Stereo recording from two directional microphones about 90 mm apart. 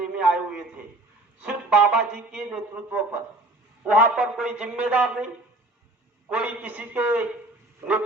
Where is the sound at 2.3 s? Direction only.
10° right (ahead or behind).